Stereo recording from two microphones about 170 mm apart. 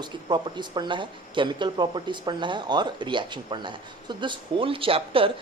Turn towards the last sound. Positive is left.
turn(degrees=-30)  # may be behind; listen again after turning